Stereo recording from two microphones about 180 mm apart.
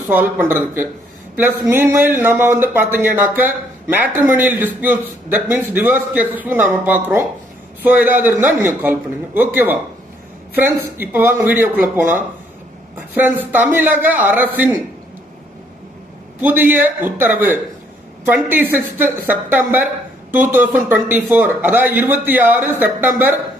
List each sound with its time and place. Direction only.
0.1 s speech: 10° right (ahead or behind)
16.4 s speech: 10° right (ahead or behind)